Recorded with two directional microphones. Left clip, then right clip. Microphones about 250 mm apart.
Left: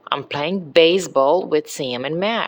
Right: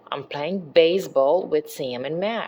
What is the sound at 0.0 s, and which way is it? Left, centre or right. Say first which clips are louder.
Speech: left 6 dB; centre.